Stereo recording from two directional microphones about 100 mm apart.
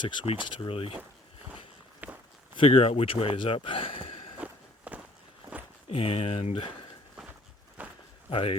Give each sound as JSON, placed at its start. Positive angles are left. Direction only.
{"t": 0.3, "sound": "speech", "side_deg": 55}
{"t": 2.0, "sound": "walk", "side_deg": -15}
{"t": 2.6, "sound": "speech", "side_deg": 75}
{"t": 4.9, "sound": "walk", "side_deg": -15}
{"t": 5.9, "sound": "speech", "side_deg": 75}
{"t": 7.8, "sound": "walk", "side_deg": -15}
{"t": 8.3, "sound": "speech", "side_deg": 65}